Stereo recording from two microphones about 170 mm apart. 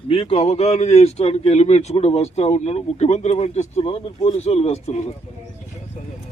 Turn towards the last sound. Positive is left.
turn(degrees=40)  # may be behind; listen again after turning